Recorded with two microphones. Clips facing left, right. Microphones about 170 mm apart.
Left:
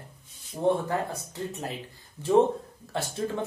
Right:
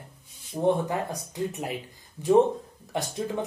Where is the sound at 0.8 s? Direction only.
15° right (ahead or behind).